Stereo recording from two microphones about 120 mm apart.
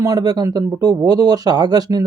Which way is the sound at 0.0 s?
30° right (ahead or behind).